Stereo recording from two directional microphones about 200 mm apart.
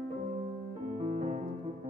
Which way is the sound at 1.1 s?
35° right (ahead or behind).